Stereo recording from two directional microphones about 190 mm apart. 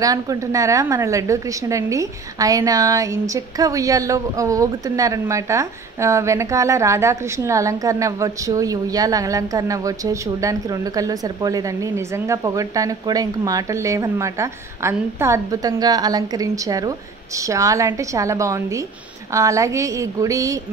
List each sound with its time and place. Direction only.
0.0 s a woman's voice: 20° right (ahead or behind)